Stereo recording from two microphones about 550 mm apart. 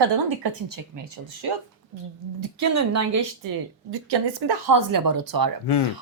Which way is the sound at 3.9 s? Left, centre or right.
Right.